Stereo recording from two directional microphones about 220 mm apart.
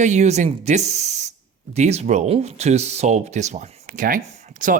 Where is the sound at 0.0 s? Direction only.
30° right (ahead or behind).